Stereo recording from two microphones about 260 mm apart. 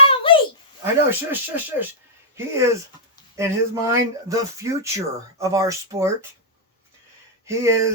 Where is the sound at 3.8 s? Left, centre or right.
Centre.